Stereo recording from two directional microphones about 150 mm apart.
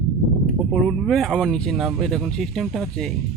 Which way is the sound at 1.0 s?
Centre (ahead or behind).